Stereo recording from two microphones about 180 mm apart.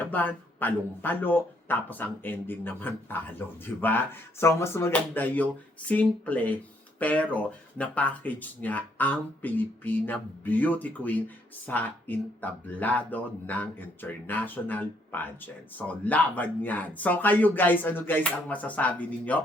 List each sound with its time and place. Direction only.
0.0 s speech: 10° left (ahead or behind)